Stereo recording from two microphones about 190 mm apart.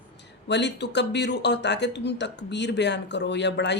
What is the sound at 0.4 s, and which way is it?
Speech, 65° left (ahead or behind).